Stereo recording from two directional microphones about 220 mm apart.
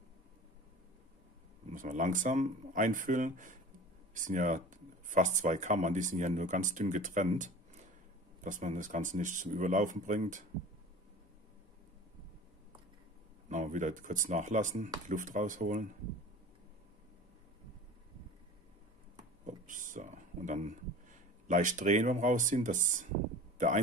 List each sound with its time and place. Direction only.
1.7 s speech: 35° right (ahead or behind)
13.5 s speech: 35° right (ahead or behind)
19.6 s speech: 35° right (ahead or behind)